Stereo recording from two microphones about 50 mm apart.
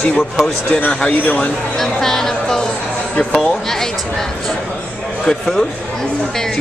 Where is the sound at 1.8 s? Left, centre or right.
Centre.